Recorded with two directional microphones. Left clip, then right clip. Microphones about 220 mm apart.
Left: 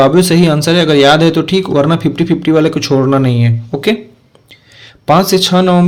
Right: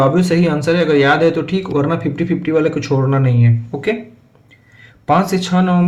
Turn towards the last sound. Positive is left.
turn(degrees=45)  # may be behind; listen again after turning